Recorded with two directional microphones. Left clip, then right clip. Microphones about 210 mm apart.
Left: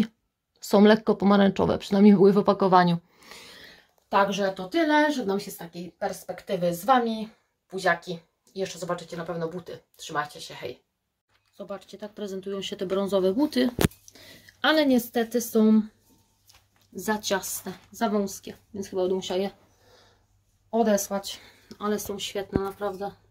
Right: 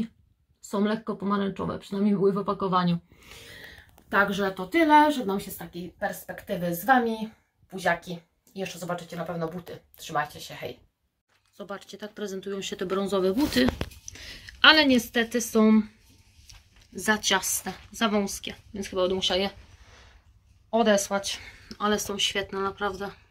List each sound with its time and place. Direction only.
0.7 s speech: 50° left (ahead or behind)
3.3 s a sound: 20° left (ahead or behind)
4.1 s a woman's voice: centre (ahead or behind)
16.9 s speech: centre (ahead or behind)
20.7 s speech: 5° left (ahead or behind)
22.8 s speech: 20° right (ahead or behind)